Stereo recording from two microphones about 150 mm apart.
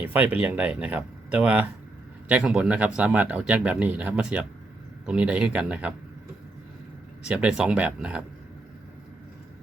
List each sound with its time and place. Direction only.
0.0 s speech: 10° right (ahead or behind)
7.3 s speech: 5° right (ahead or behind)